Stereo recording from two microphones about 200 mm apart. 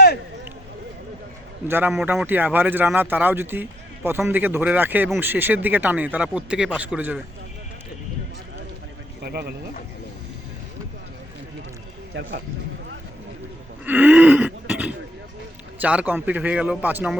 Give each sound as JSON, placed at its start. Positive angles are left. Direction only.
{"t": 1.6, "sound": "speech", "side_deg": -10}
{"t": 9.2, "sound": "speech", "side_deg": -50}
{"t": 13.8, "sound": "a sound", "side_deg": -10}
{"t": 15.8, "sound": "speech", "side_deg": -5}